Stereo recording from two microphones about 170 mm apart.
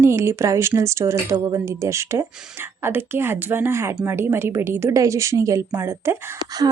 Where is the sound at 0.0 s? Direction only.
15° right (ahead or behind).